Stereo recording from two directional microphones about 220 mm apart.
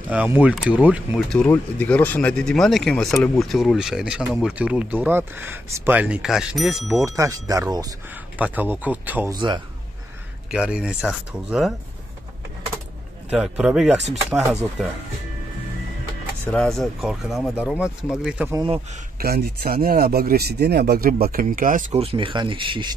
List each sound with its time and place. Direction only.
0.1 s speech: 5° right (ahead or behind)
7.1 s speech: 15° right (ahead or behind)
9.3 s speech: 20° right (ahead or behind)
10.5 s speech: 5° right (ahead or behind)
13.3 s speech: 5° right (ahead or behind)
16.4 s speech: 5° left (ahead or behind)
19.1 s speech: 45° right (ahead or behind); by 22.9 s 20° right (ahead or behind)